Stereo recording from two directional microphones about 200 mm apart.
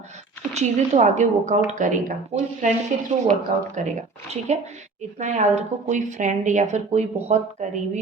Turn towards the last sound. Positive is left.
turn(degrees=-35)  # may be behind; listen again after turning